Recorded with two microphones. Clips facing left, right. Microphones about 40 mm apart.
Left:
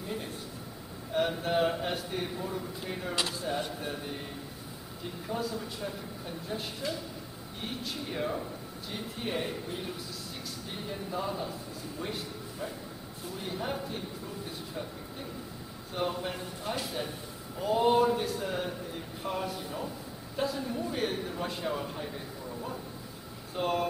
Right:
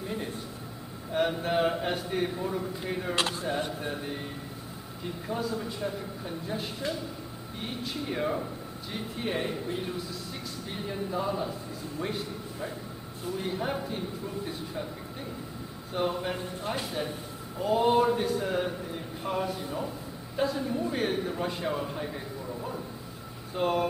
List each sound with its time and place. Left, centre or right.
1.1 s a man's voice: centre
3.2 s speech: right
3.4 s a man's voice: centre
5.3 s a man's voice: centre
10.9 s a man's voice: centre
15.9 s a man's voice: centre
23.5 s speech: centre